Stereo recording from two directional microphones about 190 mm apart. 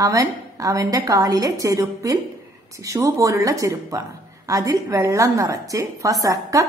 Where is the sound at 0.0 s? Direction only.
20° right (ahead or behind).